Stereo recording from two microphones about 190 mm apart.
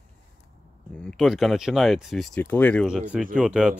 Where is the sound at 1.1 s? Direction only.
Centre (ahead or behind).